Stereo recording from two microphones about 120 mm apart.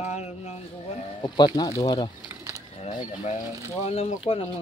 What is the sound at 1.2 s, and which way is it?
Speech, 35° left (ahead or behind).